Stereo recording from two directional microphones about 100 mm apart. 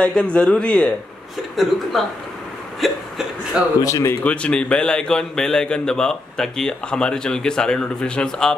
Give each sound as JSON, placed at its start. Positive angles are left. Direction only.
{"t": 0.0, "sound": "a man's voice", "side_deg": 10}
{"t": 1.6, "sound": "speech", "side_deg": 0}
{"t": 3.8, "sound": "speech", "side_deg": 30}
{"t": 4.2, "sound": "a man's voice", "side_deg": 10}